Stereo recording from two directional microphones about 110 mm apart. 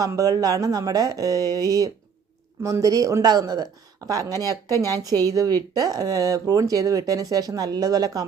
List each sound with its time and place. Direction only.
0.0 s speech: 30° right (ahead or behind)